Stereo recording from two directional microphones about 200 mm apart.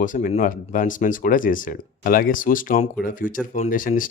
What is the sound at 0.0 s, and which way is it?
Speech, 40° left (ahead or behind).